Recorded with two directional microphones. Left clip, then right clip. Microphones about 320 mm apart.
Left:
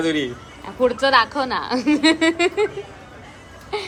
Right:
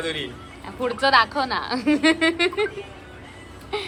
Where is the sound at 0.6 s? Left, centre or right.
Centre.